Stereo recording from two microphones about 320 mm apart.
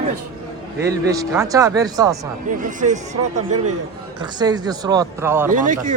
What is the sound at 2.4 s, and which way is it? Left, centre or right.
A man's voice, right.